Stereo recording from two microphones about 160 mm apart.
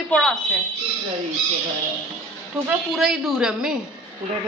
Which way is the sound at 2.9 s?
Centre (ahead or behind).